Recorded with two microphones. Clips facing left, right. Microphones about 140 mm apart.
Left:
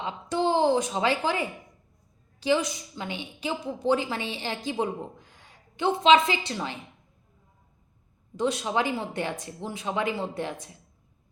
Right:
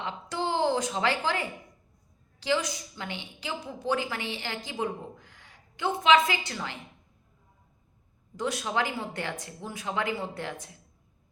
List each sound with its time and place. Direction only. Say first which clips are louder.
0.0 s a woman's voice: left 5 dB; 20° left (ahead or behind)
8.4 s a woman's voice: left 3 dB; 25° left (ahead or behind)